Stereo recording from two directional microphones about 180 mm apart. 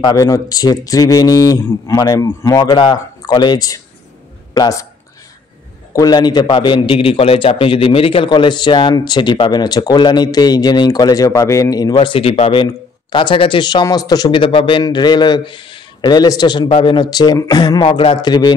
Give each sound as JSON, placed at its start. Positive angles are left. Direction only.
{"t": 0.0, "sound": "a man's voice", "side_deg": 20}
{"t": 5.9, "sound": "a man's voice", "side_deg": 25}